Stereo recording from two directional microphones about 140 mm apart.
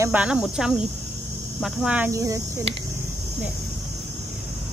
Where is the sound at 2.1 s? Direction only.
25° right (ahead or behind).